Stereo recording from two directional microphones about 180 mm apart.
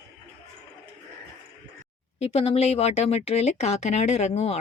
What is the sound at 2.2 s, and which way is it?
Speech, 35° left (ahead or behind).